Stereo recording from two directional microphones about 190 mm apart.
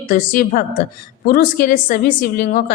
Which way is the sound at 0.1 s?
45° left (ahead or behind).